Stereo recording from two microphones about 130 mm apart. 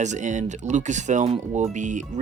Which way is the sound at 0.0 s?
65° right (ahead or behind).